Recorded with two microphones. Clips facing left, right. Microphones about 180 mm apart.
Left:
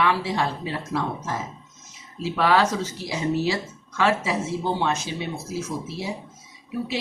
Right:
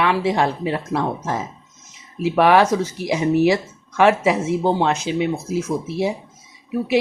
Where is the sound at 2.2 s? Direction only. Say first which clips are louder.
Right 6 dB; 15° right (ahead or behind).